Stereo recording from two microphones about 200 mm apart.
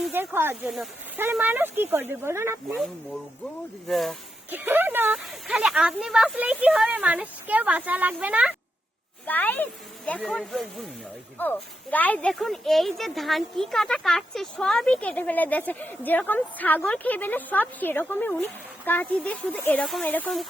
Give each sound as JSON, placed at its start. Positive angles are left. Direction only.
{"t": 0.0, "sound": "speech", "side_deg": -10}
{"t": 3.8, "sound": "speech", "side_deg": 0}
{"t": 4.5, "sound": "speech", "side_deg": -10}
{"t": 9.2, "sound": "speech", "side_deg": 10}